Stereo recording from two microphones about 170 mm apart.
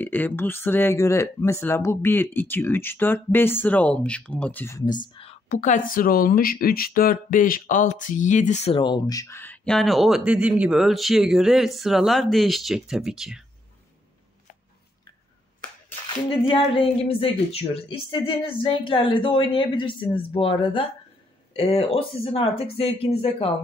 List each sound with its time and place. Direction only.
0.0 s speech: 10° left (ahead or behind)
5.1 s a sound: 35° left (ahead or behind)
5.5 s speech: 50° left (ahead or behind); by 13.5 s 5° right (ahead or behind)
16.3 s speech: 30° left (ahead or behind)